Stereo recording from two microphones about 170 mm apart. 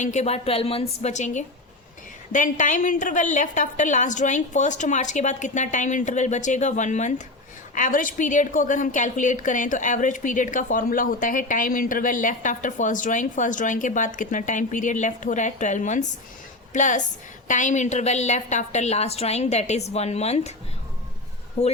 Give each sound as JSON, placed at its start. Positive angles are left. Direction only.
{"t": 0.0, "sound": "a woman's voice", "side_deg": 45}
{"t": 21.6, "sound": "a woman's voice", "side_deg": 40}